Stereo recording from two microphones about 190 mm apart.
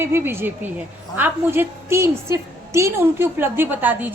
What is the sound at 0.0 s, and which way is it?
A woman's voice, 10° right (ahead or behind).